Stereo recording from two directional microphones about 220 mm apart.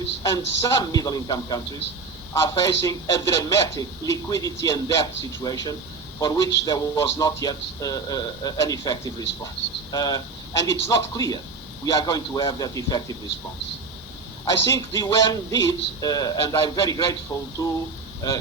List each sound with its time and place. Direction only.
0.2 s a man's voice: 15° left (ahead or behind)
14.4 s a man's voice: 15° left (ahead or behind)